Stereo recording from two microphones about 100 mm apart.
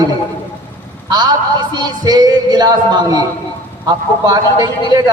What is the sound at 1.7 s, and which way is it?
Music, 45° right (ahead or behind).